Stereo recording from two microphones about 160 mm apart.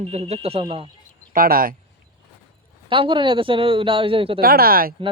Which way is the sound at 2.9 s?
35° right (ahead or behind).